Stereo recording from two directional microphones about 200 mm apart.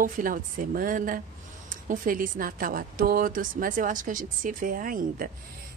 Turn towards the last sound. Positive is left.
turn(degrees=-45)  # may be behind; listen again after turning